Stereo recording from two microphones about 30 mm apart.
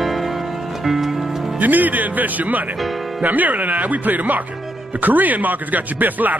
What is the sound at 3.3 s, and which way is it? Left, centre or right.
Speech, right.